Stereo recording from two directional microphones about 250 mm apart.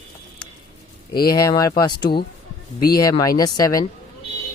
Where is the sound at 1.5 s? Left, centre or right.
Centre.